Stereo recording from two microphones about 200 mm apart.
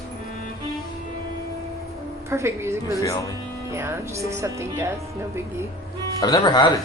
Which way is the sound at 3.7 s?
15° right (ahead or behind).